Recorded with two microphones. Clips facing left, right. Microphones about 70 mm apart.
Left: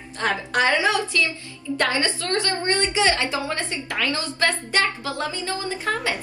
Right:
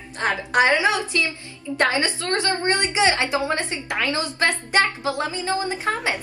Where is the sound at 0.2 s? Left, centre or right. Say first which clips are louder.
Right 2 dB; right.